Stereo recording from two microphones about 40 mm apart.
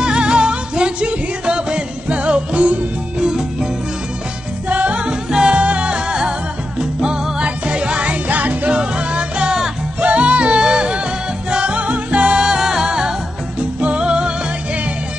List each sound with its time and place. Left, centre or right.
0.0 s music: right
3.2 s music: centre
4.6 s music: right
8.3 s music: right
8.7 s music: right
13.6 s music: right